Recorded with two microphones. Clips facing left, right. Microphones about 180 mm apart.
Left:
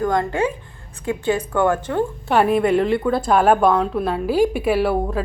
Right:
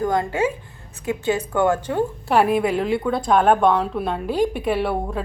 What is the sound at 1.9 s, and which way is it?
Speech, 20° right (ahead or behind).